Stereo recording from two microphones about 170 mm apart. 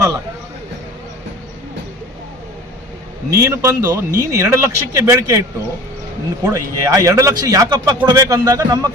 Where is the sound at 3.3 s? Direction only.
15° right (ahead or behind).